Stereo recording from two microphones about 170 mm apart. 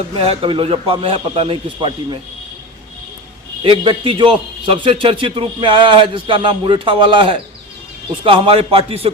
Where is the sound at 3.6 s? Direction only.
30° right (ahead or behind).